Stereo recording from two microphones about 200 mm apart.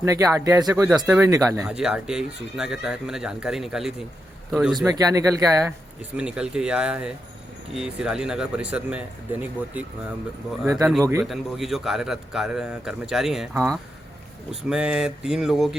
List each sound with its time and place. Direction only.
0.0 s speech: 15° right (ahead or behind)
1.6 s a man's voice: 5° right (ahead or behind)
4.9 s speech: 15° right (ahead or behind)
6.1 s a man's voice: 5° right (ahead or behind)
11.2 s a man's voice: centre (ahead or behind)